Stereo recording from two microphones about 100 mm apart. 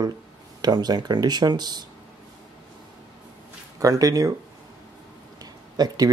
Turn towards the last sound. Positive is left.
turn(degrees=-40)  # may be behind; listen again after turning